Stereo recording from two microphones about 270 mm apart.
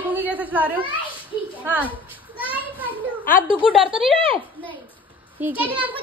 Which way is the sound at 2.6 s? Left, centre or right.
Centre.